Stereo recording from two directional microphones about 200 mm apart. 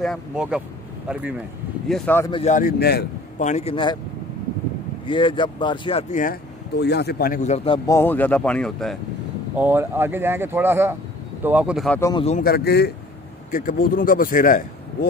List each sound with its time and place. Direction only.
0.0 s speech: centre (ahead or behind)
1.9 s speech: centre (ahead or behind)
2.3 s a man's voice: 35° left (ahead or behind); by 3.1 s 55° left (ahead or behind)
3.3 s speech: 35° left (ahead or behind)
5.0 s speech: 25° left (ahead or behind)
6.8 s a man's voice: 55° left (ahead or behind); by 7.8 s 30° left (ahead or behind)
7.8 s speech: 15° left (ahead or behind)
9.6 s speech: 10° right (ahead or behind)
12.0 s speech: 20° left (ahead or behind)
12.3 s a man's voice: 45° left (ahead or behind)